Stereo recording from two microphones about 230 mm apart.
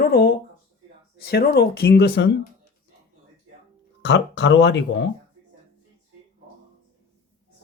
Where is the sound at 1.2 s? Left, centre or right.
Left.